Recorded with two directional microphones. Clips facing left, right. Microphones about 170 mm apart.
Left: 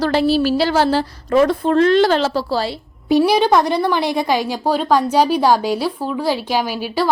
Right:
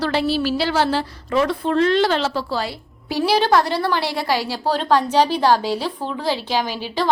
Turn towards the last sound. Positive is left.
turn(degrees=10)  # may be behind; listen again after turning